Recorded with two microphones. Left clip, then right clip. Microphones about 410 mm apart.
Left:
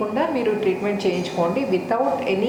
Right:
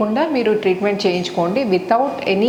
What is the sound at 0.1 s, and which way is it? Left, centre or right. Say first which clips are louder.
A woman's voice: right 4 dB; right.